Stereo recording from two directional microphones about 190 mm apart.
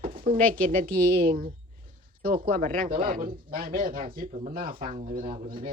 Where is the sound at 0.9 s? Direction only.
10° left (ahead or behind).